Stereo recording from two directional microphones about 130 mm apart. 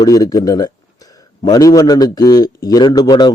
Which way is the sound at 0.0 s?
30° left (ahead or behind).